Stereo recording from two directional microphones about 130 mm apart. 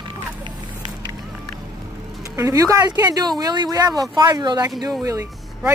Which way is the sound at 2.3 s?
25° right (ahead or behind).